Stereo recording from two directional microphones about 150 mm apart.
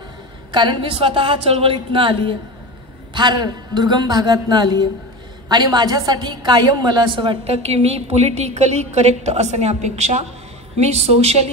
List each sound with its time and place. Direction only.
0.5 s a woman's voice: 30° right (ahead or behind)